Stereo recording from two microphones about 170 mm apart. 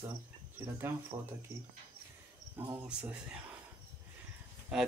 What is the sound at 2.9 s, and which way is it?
Speech, 5° right (ahead or behind).